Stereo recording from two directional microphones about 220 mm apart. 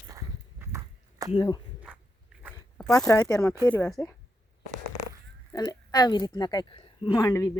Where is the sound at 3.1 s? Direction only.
15° left (ahead or behind).